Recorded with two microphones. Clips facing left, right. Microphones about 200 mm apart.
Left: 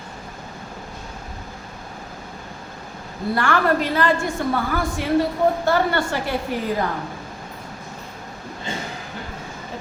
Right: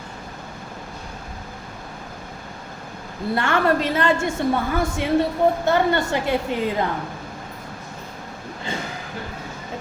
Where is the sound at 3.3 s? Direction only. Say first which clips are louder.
Even; 25° right (ahead or behind).